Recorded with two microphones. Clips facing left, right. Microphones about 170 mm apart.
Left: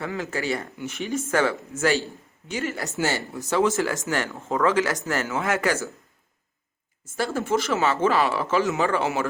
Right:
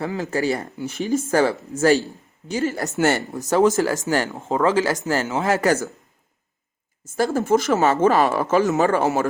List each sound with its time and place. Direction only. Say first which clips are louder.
0.0 s speech: right 5 dB; 35° right (ahead or behind)
3.0 s speech: right 7 dB; 55° right (ahead or behind); by 5.9 s 40° right (ahead or behind)
7.2 s speech: right 5 dB; 40° right (ahead or behind)